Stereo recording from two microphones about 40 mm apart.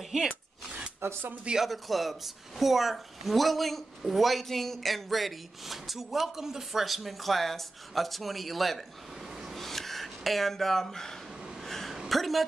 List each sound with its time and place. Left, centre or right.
1.0 s speech: right
1.6 s speech: centre
9.4 s a sound: centre
12.1 s speech: centre